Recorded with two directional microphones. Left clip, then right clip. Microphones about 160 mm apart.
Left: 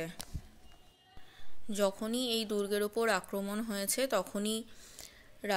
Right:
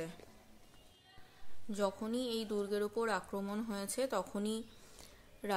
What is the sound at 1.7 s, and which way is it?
Speech, 15° left (ahead or behind).